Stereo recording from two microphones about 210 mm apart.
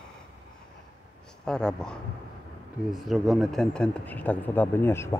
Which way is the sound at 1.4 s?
5° left (ahead or behind).